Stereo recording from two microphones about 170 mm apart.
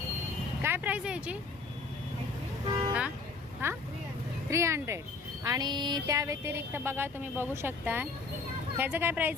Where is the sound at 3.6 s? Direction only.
15° right (ahead or behind).